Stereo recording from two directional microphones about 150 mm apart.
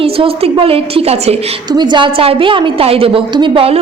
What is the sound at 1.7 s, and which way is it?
A woman's voice, 30° right (ahead or behind).